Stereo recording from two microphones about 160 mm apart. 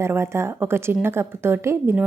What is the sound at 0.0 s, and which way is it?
Speech, 15° right (ahead or behind).